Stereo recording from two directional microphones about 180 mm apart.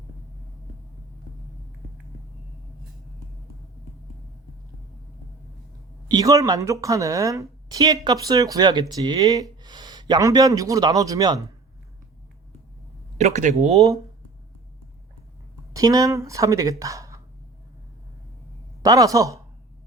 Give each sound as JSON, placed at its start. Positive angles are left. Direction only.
{"t": 6.1, "sound": "speech", "side_deg": -20}
{"t": 13.1, "sound": "speech", "side_deg": -40}
{"t": 15.7, "sound": "speech", "side_deg": -20}
{"t": 18.8, "sound": "speech", "side_deg": -20}